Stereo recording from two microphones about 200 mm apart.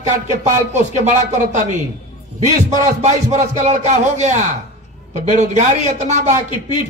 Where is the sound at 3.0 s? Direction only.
35° right (ahead or behind).